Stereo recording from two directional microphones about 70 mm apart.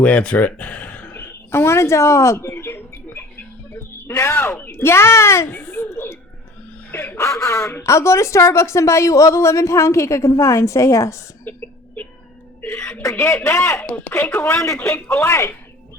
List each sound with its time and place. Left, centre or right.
0.0 s speech: centre
1.1 s a sound: left
3.7 s speech: left
5.5 s a sound: left
7.2 s speech: left
11.4 s a sound: left
12.7 s speech: centre
13.0 s speech: left
13.2 s speech: left
13.8 s speech: left